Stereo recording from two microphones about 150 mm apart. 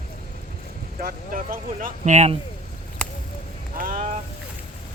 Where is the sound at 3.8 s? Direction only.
65° right (ahead or behind).